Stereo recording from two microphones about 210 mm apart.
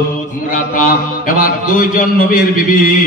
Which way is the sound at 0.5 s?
40° left (ahead or behind).